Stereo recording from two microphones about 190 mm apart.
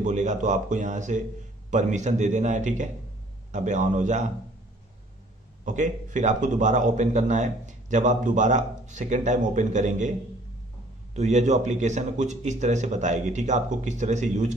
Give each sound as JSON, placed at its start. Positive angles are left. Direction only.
{"t": 0.0, "sound": "a man's voice", "side_deg": -40}
{"t": 5.7, "sound": "a man's voice", "side_deg": -40}
{"t": 11.1, "sound": "a man's voice", "side_deg": -35}